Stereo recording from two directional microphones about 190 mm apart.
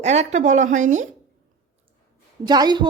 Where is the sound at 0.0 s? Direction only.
35° right (ahead or behind).